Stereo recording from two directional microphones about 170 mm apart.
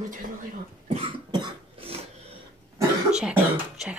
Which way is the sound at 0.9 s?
30° right (ahead or behind).